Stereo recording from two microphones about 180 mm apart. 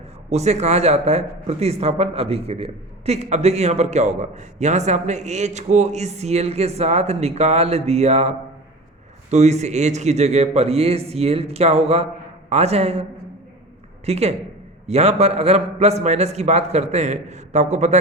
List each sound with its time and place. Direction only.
0.3 s speech: 40° right (ahead or behind)